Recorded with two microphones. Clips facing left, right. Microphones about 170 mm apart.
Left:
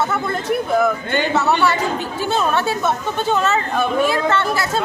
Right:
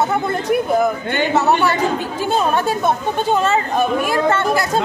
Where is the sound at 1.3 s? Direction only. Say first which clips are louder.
Right 2 dB; 15° right (ahead or behind).